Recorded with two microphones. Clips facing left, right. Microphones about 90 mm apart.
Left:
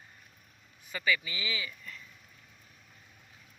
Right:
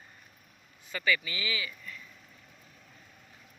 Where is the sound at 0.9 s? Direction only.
15° left (ahead or behind).